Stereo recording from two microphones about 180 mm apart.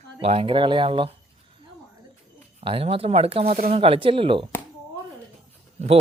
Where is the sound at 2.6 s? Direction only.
30° right (ahead or behind).